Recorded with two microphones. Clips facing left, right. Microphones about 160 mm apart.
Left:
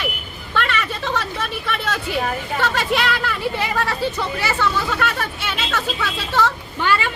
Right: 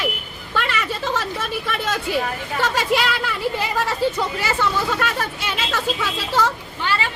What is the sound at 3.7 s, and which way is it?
Speech, 10° right (ahead or behind).